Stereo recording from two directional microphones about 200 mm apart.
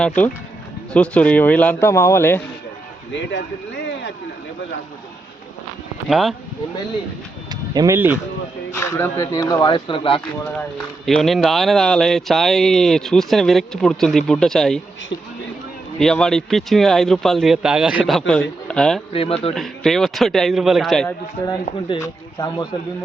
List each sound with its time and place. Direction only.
0.9 s speech: 5° left (ahead or behind)
3.1 s speech: 65° left (ahead or behind)
6.1 s speech: centre (ahead or behind)
7.5 s speech: 20° right (ahead or behind)
8.7 s speech: 15° left (ahead or behind)
10.3 s speech: 10° left (ahead or behind)
16.0 s speech: centre (ahead or behind)
21.4 s speech: 20° left (ahead or behind)